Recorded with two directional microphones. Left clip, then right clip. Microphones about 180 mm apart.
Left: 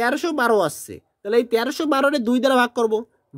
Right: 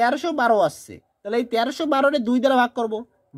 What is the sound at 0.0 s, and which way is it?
Speech, 35° left (ahead or behind).